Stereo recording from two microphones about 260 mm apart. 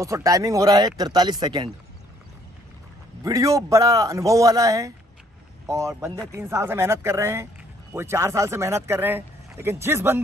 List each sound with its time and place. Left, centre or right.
0.0 s speech: centre
3.3 s speech: centre